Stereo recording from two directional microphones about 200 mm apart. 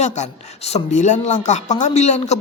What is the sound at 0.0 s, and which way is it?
A man's voice, 35° left (ahead or behind).